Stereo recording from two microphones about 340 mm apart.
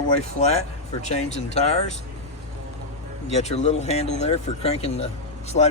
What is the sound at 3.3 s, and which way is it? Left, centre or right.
Speech, centre.